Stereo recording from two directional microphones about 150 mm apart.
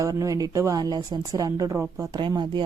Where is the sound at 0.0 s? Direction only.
20° right (ahead or behind).